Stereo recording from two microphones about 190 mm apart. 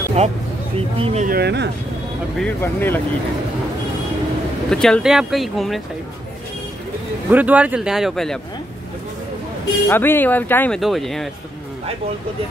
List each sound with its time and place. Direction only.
0.2 s speech: 35° right (ahead or behind)
1.2 s speech: 55° right (ahead or behind)
2.3 s speech: 10° left (ahead or behind)
4.6 s speech: 5° left (ahead or behind)
7.2 s speech: 10° right (ahead or behind)
9.8 s speech: 10° left (ahead or behind)